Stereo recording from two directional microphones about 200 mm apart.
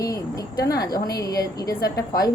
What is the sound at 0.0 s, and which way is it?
A woman's voice, 15° left (ahead or behind).